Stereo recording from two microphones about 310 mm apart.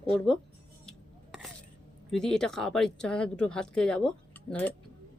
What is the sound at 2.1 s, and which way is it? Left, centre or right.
Speech, centre.